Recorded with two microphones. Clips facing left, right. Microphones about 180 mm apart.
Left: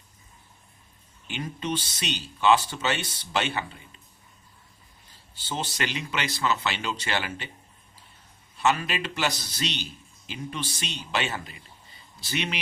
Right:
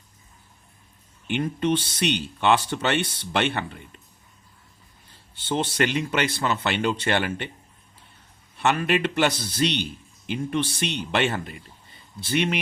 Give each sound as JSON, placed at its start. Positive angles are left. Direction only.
{"t": 1.3, "sound": "a man's voice", "side_deg": -55}
{"t": 5.3, "sound": "a man's voice", "side_deg": -60}
{"t": 8.5, "sound": "a man's voice", "side_deg": -55}